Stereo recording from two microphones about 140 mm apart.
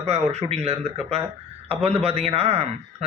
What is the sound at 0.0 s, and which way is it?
Speech, 50° right (ahead or behind).